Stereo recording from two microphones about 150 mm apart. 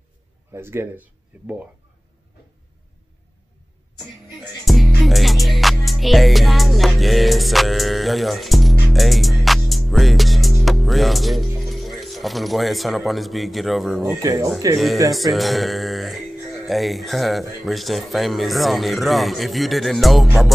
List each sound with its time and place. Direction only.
0.5 s speech: 15° right (ahead or behind)
4.6 s music: centre (ahead or behind)
14.2 s speech: 20° right (ahead or behind)
15.1 s speech: centre (ahead or behind)